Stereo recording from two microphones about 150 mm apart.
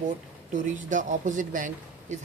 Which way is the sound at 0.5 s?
55° right (ahead or behind).